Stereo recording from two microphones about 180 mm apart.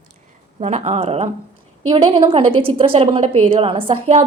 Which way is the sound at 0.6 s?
40° right (ahead or behind).